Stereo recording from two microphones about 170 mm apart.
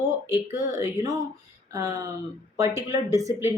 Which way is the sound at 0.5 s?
20° right (ahead or behind).